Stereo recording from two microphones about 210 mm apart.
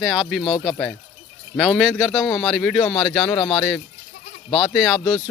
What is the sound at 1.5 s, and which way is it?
Speech, centre (ahead or behind).